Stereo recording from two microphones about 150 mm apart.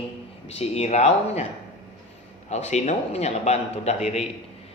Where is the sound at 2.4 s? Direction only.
50° left (ahead or behind).